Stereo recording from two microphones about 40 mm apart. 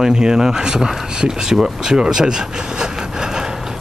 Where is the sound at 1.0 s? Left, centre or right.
Centre.